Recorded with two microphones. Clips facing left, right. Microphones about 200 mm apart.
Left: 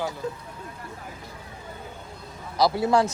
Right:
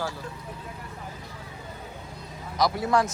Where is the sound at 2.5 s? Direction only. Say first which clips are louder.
Left 3 dB; 30° left (ahead or behind).